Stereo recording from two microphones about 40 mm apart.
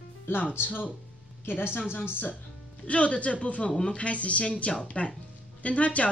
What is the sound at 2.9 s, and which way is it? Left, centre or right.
Speech, left.